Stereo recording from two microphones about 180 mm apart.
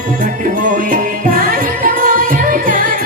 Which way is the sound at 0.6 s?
50° right (ahead or behind).